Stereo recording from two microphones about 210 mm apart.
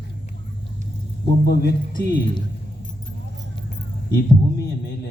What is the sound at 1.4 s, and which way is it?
Speech, 50° left (ahead or behind).